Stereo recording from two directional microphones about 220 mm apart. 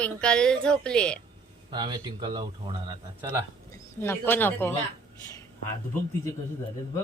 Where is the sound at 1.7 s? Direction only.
20° right (ahead or behind).